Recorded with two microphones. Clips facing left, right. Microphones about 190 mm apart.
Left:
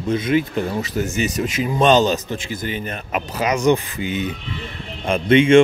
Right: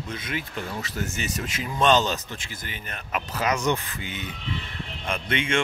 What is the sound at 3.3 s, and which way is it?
Speech, 15° left (ahead or behind).